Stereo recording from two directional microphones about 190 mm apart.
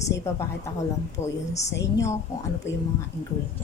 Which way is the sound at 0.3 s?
15° left (ahead or behind).